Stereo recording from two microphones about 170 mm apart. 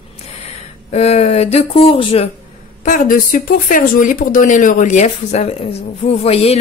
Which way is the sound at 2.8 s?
55° left (ahead or behind).